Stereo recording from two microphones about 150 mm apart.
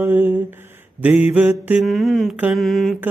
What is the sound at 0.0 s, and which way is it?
Music, 10° right (ahead or behind).